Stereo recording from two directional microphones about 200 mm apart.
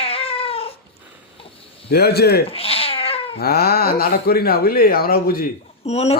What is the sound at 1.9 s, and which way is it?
Speech, 55° left (ahead or behind).